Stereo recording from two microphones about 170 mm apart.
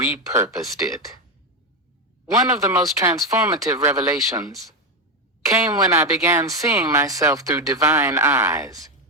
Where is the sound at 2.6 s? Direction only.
20° right (ahead or behind).